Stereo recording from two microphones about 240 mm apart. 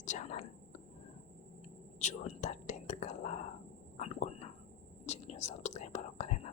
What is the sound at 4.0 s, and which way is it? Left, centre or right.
Whispering, left.